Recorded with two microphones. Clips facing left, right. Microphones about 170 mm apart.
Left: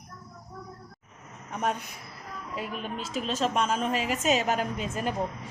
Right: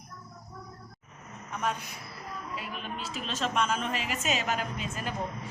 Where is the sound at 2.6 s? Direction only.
45° left (ahead or behind).